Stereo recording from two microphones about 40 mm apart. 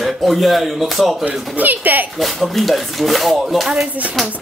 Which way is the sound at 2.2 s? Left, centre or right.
Centre.